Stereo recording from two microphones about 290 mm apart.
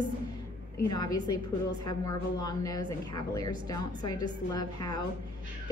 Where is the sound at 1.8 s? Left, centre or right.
Centre.